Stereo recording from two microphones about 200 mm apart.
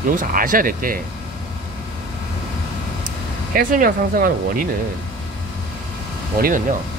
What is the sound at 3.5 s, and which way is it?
Speech, 45° right (ahead or behind).